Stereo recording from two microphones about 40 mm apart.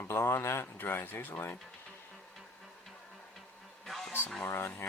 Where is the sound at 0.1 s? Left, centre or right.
Left.